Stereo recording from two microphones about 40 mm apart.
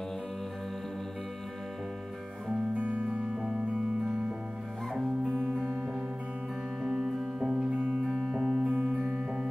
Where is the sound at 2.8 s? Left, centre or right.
Right.